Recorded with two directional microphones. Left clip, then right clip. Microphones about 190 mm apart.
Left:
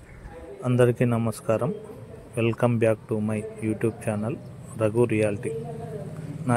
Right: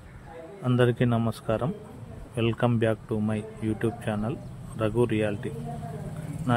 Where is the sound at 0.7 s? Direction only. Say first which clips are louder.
Left 3 dB; 5° right (ahead or behind).